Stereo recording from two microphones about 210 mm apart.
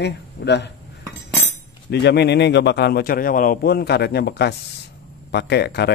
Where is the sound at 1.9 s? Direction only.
55° left (ahead or behind).